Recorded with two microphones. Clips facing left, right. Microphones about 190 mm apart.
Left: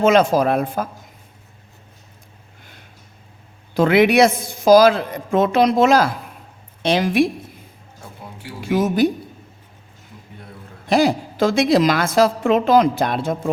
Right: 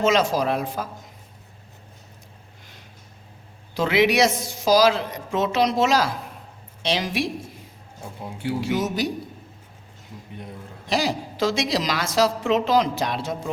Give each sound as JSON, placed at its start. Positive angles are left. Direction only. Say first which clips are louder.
{"t": 0.0, "sound": "a woman's voice", "louder": "left 6 dB", "side_deg": 55}
{"t": 3.8, "sound": "a woman's voice", "louder": "left 6 dB", "side_deg": 55}
{"t": 8.6, "sound": "a woman's voice", "louder": "left 10 dB", "side_deg": 55}
{"t": 10.8, "sound": "a woman's voice", "louder": "left 8 dB", "side_deg": 55}